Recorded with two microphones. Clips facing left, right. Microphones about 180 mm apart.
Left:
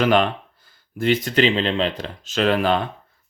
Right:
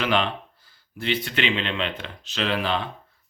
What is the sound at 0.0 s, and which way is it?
Speech, 45° left (ahead or behind).